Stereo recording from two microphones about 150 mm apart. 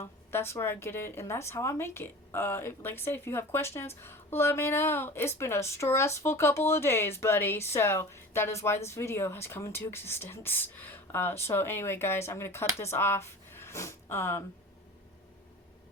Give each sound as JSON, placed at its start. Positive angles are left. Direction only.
{"t": 0.0, "sound": "a woman's voice", "side_deg": 15}